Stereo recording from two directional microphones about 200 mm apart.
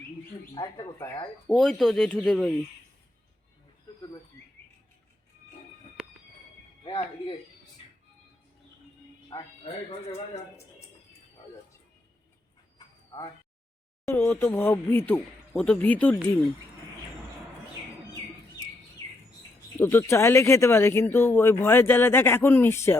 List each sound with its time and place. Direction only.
0.5 s speech: 20° left (ahead or behind)
1.5 s speech: centre (ahead or behind)
6.8 s speech: 25° left (ahead or behind)
9.7 s speech: 30° left (ahead or behind)
13.1 s speech: 15° left (ahead or behind)
19.8 s speech: 10° left (ahead or behind)